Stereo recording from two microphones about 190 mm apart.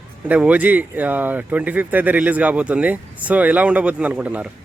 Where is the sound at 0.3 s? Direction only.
10° right (ahead or behind).